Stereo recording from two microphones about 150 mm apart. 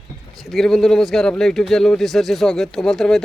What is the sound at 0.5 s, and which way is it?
Speech, centre (ahead or behind).